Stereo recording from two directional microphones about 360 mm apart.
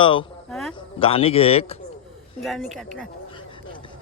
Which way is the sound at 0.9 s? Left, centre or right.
Centre.